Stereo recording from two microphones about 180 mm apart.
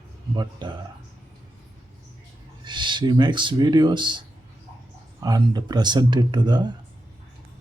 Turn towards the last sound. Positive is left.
turn(degrees=-25)  # may be behind; listen again after turning